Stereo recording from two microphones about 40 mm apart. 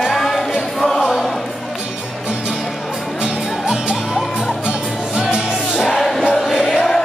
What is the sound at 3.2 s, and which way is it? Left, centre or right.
Music, centre.